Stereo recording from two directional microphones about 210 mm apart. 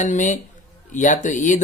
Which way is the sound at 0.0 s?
35° left (ahead or behind).